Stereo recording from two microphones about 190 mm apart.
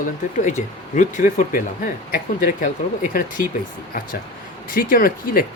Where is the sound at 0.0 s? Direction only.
40° left (ahead or behind).